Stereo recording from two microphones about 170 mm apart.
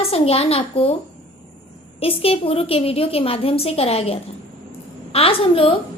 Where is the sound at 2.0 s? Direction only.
35° left (ahead or behind).